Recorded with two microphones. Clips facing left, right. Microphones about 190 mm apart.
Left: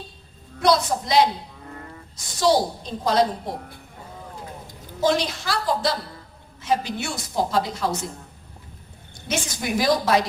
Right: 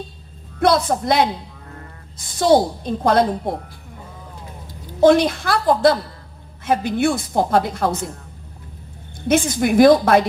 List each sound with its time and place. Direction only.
0.6 s a woman's voice: 55° right (ahead or behind)
2.4 s a woman's voice: 55° right (ahead or behind)
4.9 s a woman's voice: 55° right (ahead or behind)
9.2 s a woman's voice: 55° right (ahead or behind)